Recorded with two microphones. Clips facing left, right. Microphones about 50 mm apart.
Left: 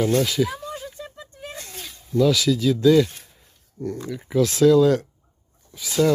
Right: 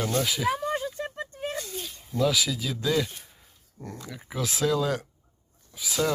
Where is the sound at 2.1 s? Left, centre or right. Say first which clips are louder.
Left 7 dB; centre.